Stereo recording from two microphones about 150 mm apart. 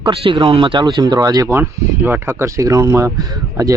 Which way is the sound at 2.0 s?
15° right (ahead or behind).